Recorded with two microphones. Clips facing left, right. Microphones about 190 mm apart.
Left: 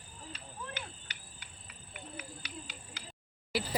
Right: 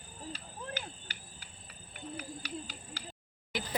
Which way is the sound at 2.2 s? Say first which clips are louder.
Right 6 dB; 35° right (ahead or behind).